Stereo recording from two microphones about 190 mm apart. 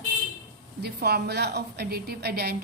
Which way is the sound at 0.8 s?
55° right (ahead or behind).